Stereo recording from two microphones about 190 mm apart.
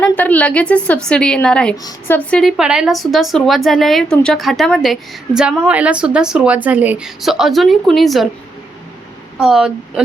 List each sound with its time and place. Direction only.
0.0 s a woman's voice: 10° left (ahead or behind)
1.7 s a woman's voice: 20° left (ahead or behind)
2.1 s a woman's voice: 5° left (ahead or behind)
9.4 s a woman's voice: 5° right (ahead or behind)